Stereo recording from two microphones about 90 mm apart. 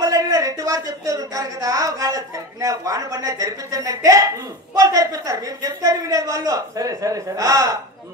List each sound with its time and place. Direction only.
0.0 s speech: 40° right (ahead or behind)